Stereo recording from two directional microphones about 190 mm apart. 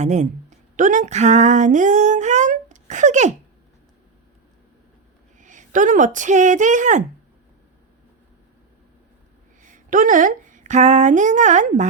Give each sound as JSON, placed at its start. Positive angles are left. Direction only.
{"t": 0.0, "sound": "speech", "side_deg": -40}
{"t": 5.4, "sound": "speech", "side_deg": -40}
{"t": 9.6, "sound": "speech", "side_deg": -45}